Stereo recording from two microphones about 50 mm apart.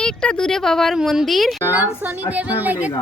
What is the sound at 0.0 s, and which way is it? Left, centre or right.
A woman's voice, centre.